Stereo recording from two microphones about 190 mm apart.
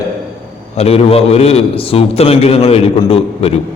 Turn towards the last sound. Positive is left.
turn(degrees=30)  # may be behind; listen again after turning